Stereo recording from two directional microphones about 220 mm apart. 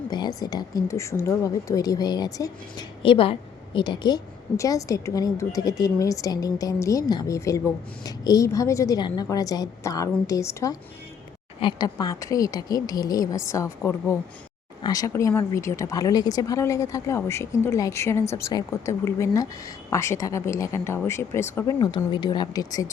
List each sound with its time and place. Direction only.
0.1 s a woman's voice: 15° left (ahead or behind)